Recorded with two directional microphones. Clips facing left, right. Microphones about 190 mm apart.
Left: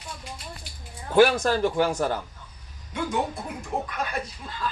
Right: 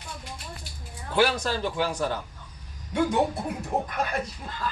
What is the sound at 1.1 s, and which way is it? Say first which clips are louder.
Speech: left 5 dB; 50° left (ahead or behind).